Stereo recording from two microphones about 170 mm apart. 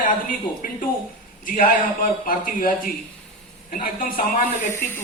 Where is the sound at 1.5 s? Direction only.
55° left (ahead or behind).